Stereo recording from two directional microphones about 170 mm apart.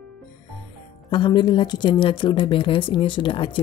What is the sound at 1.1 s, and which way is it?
Speech, 25° left (ahead or behind).